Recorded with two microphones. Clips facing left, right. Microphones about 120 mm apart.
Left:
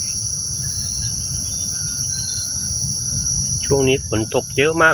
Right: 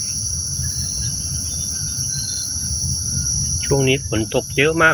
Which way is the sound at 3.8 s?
25° left (ahead or behind).